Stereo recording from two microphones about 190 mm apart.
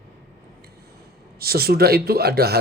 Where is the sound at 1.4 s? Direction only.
55° right (ahead or behind).